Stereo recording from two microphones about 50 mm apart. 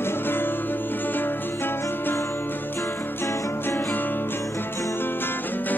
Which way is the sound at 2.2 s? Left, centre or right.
Left.